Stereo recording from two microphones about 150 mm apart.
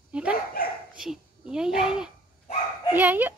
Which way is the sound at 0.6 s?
85° left.